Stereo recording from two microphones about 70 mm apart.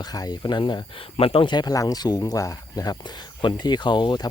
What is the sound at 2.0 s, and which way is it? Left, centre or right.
Speech, left.